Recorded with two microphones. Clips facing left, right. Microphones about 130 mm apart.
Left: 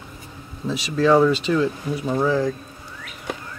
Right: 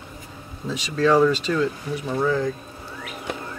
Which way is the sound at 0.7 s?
5° left (ahead or behind).